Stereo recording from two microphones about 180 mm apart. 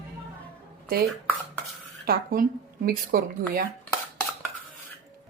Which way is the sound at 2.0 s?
55° right (ahead or behind).